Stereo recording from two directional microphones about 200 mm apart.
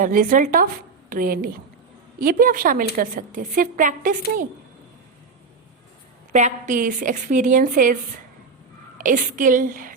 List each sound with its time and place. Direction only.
0.0 s speech: 45° right (ahead or behind)
6.3 s a woman's voice: 35° right (ahead or behind)
9.0 s a woman's voice: 40° right (ahead or behind)